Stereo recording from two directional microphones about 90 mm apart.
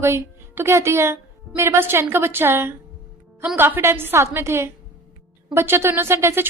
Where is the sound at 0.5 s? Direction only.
30° right (ahead or behind).